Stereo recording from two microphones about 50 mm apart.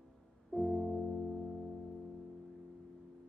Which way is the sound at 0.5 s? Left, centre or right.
Centre.